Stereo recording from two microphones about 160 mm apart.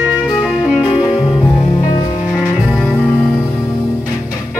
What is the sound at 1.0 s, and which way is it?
Music, centre (ahead or behind).